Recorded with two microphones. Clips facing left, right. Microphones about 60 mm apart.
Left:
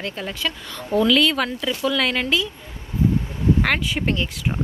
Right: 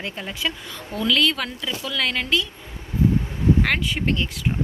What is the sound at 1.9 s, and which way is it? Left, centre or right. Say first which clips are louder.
Speech: right 2 dB; centre.